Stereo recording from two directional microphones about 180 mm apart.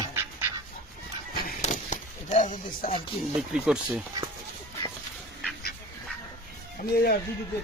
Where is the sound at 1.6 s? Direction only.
40° left (ahead or behind).